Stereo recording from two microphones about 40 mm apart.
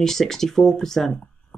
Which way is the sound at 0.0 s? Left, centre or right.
Centre.